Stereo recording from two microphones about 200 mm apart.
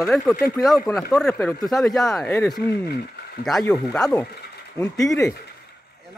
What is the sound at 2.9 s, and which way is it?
Speech, 50° left (ahead or behind).